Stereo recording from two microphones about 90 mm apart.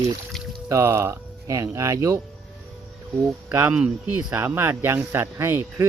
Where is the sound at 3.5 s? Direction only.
20° right (ahead or behind).